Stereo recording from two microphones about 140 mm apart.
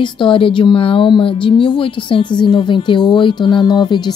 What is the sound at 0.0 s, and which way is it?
A woman's voice, 35° left (ahead or behind).